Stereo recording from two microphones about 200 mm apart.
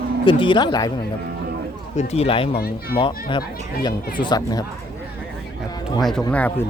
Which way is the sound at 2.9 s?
25° left (ahead or behind).